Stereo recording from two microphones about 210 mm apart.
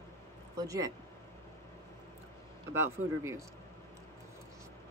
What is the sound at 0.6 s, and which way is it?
Speech, 15° right (ahead or behind).